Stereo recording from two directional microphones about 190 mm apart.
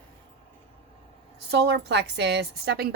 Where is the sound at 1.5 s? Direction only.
60° right (ahead or behind).